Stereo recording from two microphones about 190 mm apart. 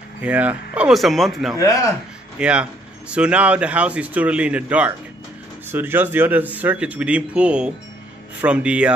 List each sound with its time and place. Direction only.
0.2 s speech: 5° right (ahead or behind)
1.6 s speech: 15° left (ahead or behind)
2.3 s speech: 5° right (ahead or behind)